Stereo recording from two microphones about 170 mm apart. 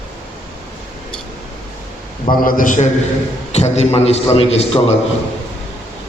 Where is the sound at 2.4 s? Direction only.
55° left (ahead or behind).